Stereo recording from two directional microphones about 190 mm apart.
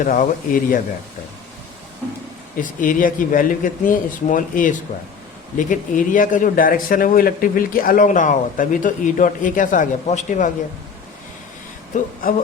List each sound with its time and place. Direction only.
0.0 s speech: 45° left (ahead or behind)
2.6 s speech: 45° left (ahead or behind)